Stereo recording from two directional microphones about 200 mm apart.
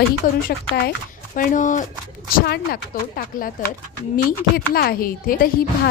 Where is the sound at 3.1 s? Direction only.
45° left (ahead or behind).